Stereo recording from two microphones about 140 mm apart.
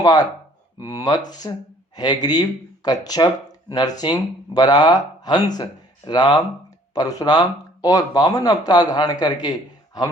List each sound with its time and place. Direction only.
0.0 s speech: 30° left (ahead or behind)